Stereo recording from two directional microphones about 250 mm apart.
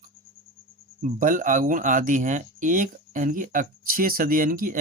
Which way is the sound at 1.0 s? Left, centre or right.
Right.